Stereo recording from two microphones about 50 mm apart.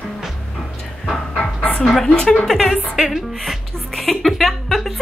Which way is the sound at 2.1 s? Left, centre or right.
Centre.